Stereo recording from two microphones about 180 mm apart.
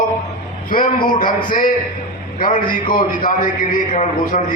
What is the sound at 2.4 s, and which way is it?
A man's voice, 50° left (ahead or behind).